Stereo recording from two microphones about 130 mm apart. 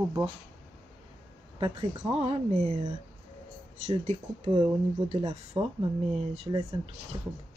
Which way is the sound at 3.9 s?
60° right (ahead or behind).